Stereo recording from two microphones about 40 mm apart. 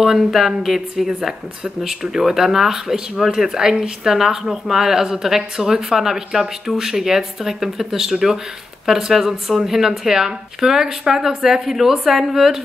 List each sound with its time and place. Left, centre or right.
0.0 s speech: centre